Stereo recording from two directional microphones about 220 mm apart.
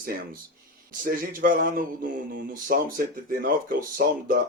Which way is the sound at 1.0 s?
40° right (ahead or behind).